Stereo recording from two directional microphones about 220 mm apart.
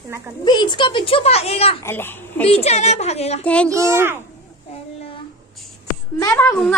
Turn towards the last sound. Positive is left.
turn(degrees=10)  # may be behind; listen again after turning